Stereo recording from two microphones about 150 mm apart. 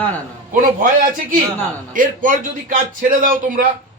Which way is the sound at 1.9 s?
65° right (ahead or behind).